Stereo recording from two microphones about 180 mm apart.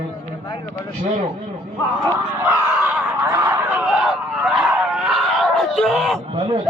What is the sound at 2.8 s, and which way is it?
Snicker, 10° right (ahead or behind).